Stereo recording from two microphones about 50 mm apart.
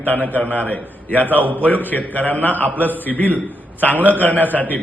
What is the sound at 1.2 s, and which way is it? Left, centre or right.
Speech, right.